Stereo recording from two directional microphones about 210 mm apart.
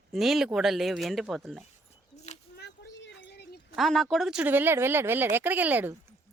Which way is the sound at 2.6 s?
55° left (ahead or behind).